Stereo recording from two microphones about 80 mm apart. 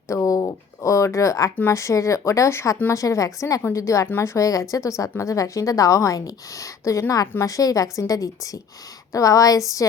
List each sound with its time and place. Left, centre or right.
0.1 s a sound: left
1.7 s speech: left
4.0 s speech: left
4.4 s speech: left